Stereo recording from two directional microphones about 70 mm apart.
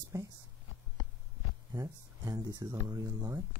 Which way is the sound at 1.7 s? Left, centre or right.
Right.